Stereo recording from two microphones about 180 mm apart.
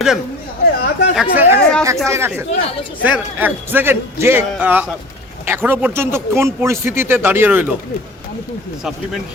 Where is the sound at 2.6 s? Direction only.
30° left (ahead or behind).